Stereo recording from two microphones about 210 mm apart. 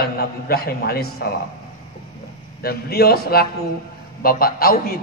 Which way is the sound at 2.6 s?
50° left (ahead or behind).